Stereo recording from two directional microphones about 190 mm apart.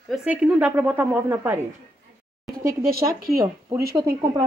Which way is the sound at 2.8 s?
55° right (ahead or behind).